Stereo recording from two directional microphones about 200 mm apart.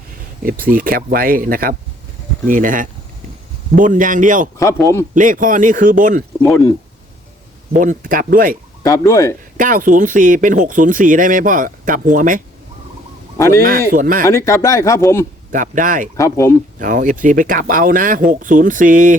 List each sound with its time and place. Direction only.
0.4 s speech: 45° right (ahead or behind)
4.5 s speech: 15° left (ahead or behind)
5.1 s speech: 40° right (ahead or behind)
6.4 s speech: 15° left (ahead or behind)
7.8 s speech: 45° right (ahead or behind)
8.8 s speech: 15° left (ahead or behind)
9.6 s speech: 45° right (ahead or behind)
13.3 s speech: 15° left (ahead or behind)
13.9 s speech: 40° right (ahead or behind)
14.3 s speech: 15° left (ahead or behind)
15.5 s speech: 40° right (ahead or behind)
16.1 s speech: 15° left (ahead or behind)
16.8 s speech: 40° right (ahead or behind)